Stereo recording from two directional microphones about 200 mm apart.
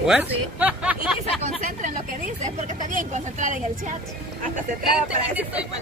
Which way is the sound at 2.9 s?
40° right (ahead or behind).